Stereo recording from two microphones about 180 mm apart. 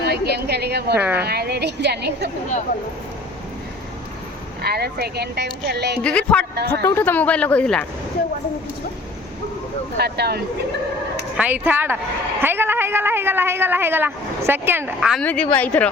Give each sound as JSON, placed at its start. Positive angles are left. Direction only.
{"t": 0.0, "sound": "a woman's voice", "side_deg": -65}
{"t": 0.9, "sound": "speech", "side_deg": -10}
{"t": 1.3, "sound": "speech", "side_deg": -65}
{"t": 4.6, "sound": "speech", "side_deg": -60}
{"t": 6.0, "sound": "speech", "side_deg": 5}
{"t": 10.0, "sound": "speech", "side_deg": -65}
{"t": 11.3, "sound": "speech", "side_deg": -10}
{"t": 15.2, "sound": "speech", "side_deg": 5}